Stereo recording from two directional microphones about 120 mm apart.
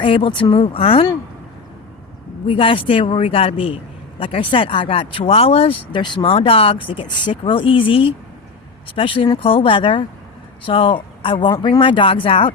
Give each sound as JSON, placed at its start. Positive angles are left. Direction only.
{"t": 0.0, "sound": "speech", "side_deg": 45}
{"t": 2.5, "sound": "speech", "side_deg": 45}